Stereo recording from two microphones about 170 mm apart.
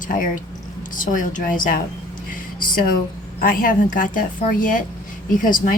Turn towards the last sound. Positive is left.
turn(degrees=55)  # may be behind; listen again after turning